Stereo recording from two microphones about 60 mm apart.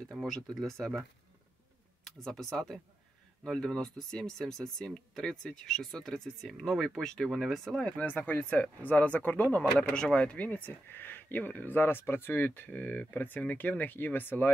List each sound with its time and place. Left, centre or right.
0.2 s speech: centre
2.0 s speech: centre
8.1 s speech: left
9.8 s speech: centre; by 14.5 s left